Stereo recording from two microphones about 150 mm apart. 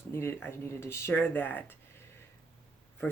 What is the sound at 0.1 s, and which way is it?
Speech, 15° left (ahead or behind).